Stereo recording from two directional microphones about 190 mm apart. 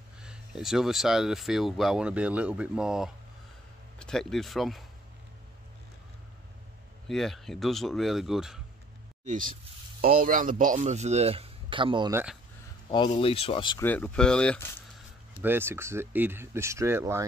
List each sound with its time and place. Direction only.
0.2 s speech: 5° right (ahead or behind)
7.1 s speech: centre (ahead or behind)
9.2 s a man's voice: 45° right (ahead or behind); by 12.1 s 25° right (ahead or behind)
12.1 s speech: 10° right (ahead or behind)
13.1 s speech: 30° left (ahead or behind)
13.7 s speech: 10° left (ahead or behind)
15.4 s speech: 10° right (ahead or behind)